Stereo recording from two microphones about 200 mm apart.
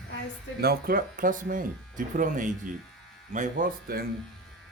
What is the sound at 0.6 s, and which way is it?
Speech, 50° right (ahead or behind).